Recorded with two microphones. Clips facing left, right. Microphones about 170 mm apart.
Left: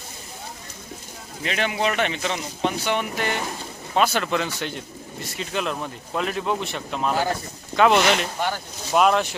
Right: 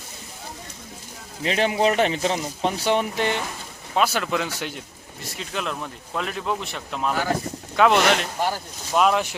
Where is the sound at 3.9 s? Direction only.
5° right (ahead or behind).